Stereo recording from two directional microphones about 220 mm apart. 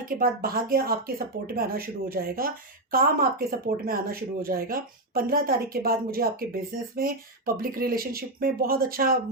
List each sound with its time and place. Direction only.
0.0 s speech: 40° right (ahead or behind)